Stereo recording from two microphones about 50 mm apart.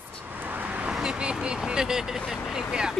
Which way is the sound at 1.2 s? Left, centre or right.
Centre.